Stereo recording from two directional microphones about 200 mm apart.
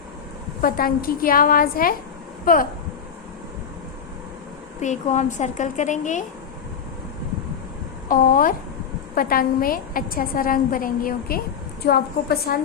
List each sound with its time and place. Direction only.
0.6 s a woman's voice: 45° left (ahead or behind)
4.8 s a woman's voice: 35° left (ahead or behind)
8.0 s a woman's voice: 45° left (ahead or behind)